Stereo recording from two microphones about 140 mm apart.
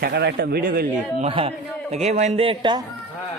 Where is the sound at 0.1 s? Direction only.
90° right.